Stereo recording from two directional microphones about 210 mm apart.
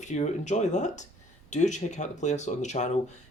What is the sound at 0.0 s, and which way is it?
Speech, 35° left (ahead or behind).